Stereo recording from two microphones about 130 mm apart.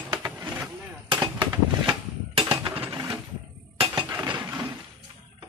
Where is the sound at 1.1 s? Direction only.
35° right (ahead or behind).